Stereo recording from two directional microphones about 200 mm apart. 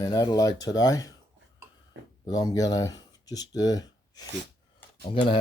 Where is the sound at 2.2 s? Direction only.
20° left (ahead or behind).